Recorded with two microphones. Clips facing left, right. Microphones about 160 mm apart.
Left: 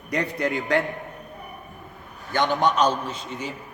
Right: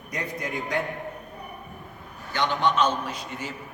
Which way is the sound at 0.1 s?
70° left (ahead or behind).